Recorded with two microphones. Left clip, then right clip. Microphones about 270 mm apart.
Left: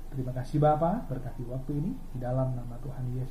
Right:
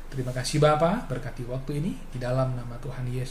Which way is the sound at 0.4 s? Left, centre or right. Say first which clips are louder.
Right 4 dB; right.